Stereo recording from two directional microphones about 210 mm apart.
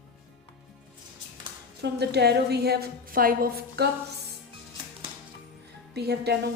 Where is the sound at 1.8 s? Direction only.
55° right (ahead or behind).